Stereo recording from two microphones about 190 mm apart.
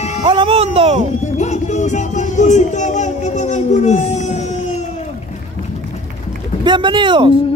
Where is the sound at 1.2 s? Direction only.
40° left (ahead or behind).